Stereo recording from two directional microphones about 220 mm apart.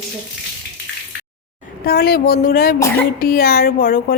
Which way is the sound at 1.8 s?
45° left (ahead or behind).